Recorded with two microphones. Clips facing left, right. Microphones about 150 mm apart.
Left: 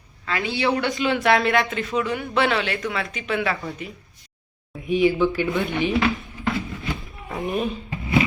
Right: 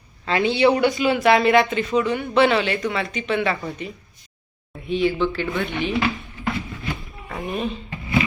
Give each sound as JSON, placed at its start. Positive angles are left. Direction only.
{"t": 0.3, "sound": "speech", "side_deg": -25}
{"t": 0.9, "sound": "speech", "side_deg": -5}
{"t": 4.9, "sound": "speech", "side_deg": 10}
{"t": 5.5, "sound": "speech", "side_deg": 0}
{"t": 5.9, "sound": "a sound", "side_deg": 0}